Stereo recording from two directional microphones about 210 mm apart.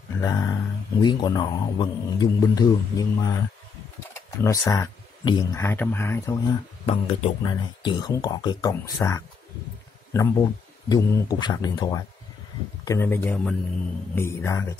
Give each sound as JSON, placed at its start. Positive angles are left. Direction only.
{"t": 0.2, "sound": "speech", "side_deg": 15}
{"t": 6.9, "sound": "speech", "side_deg": 30}